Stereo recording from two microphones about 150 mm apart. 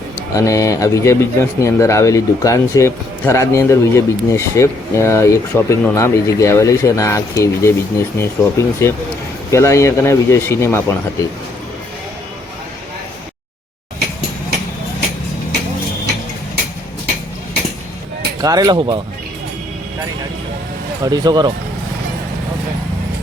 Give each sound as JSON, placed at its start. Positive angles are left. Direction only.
{"t": 0.3, "sound": "speech", "side_deg": 20}
{"t": 18.4, "sound": "speech", "side_deg": -25}
{"t": 21.0, "sound": "speech", "side_deg": -25}